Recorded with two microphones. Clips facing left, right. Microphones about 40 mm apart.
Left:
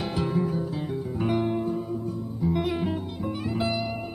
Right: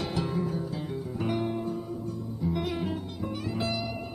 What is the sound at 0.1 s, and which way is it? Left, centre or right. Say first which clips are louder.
Music: left 4 dB; centre.